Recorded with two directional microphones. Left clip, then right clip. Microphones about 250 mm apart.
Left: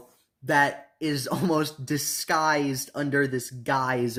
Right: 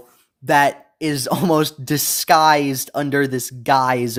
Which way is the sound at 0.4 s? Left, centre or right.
Right.